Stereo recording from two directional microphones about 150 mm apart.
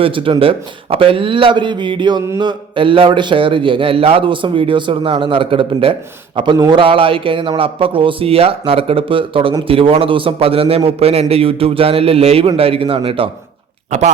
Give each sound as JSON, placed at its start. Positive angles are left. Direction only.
{"t": 0.0, "sound": "a man's voice", "side_deg": -35}